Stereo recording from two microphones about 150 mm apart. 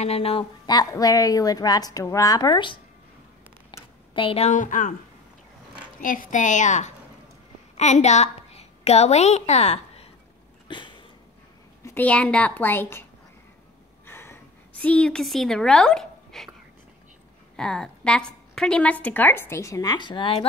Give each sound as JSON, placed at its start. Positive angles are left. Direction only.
{"t": 0.0, "sound": "speech", "side_deg": 40}
{"t": 0.7, "sound": "a woman's voice", "side_deg": 25}
{"t": 3.7, "sound": "a sound", "side_deg": 30}
{"t": 4.1, "sound": "a woman's voice", "side_deg": 35}
{"t": 5.9, "sound": "a woman's voice", "side_deg": 65}
{"t": 10.7, "sound": "a sound", "side_deg": 30}
{"t": 11.8, "sound": "a woman's voice", "side_deg": 10}
{"t": 14.0, "sound": "a sound", "side_deg": 15}
{"t": 17.6, "sound": "a woman's voice", "side_deg": 5}